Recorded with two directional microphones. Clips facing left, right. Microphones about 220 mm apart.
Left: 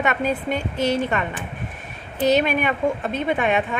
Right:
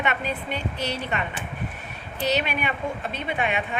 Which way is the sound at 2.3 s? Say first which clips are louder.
Left 7 dB; 45° left (ahead or behind).